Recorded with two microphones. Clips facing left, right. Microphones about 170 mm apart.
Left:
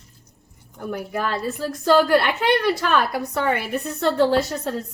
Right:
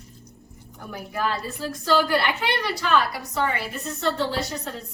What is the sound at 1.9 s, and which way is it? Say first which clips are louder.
A woman's voice: left 4 dB; 50° left (ahead or behind).